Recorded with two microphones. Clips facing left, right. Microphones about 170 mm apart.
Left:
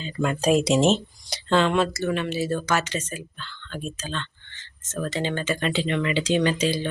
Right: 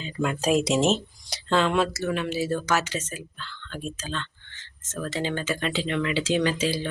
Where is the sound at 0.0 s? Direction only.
5° right (ahead or behind).